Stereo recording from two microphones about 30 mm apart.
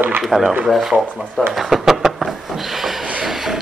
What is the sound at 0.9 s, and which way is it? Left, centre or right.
Speech, right.